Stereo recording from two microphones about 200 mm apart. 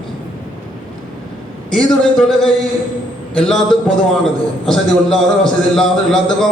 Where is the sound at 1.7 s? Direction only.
5° left (ahead or behind).